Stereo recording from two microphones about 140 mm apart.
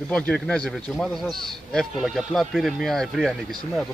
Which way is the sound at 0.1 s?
10° left (ahead or behind).